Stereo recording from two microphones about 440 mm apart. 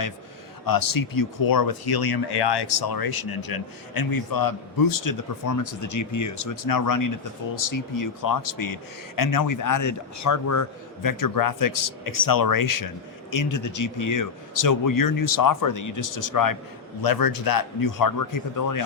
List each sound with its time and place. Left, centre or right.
0.6 s speech: left